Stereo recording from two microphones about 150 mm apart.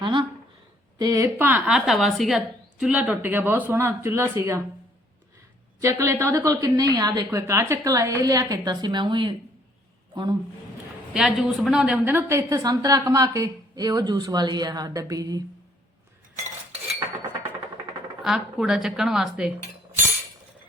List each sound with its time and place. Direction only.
0.0 s a sound: 30° right (ahead or behind)
0.9 s speech: 25° right (ahead or behind)
5.8 s a woman's voice: 20° right (ahead or behind)
11.1 s a woman's voice: 5° right (ahead or behind); by 15.4 s 25° right (ahead or behind)
18.2 s speech: 5° right (ahead or behind)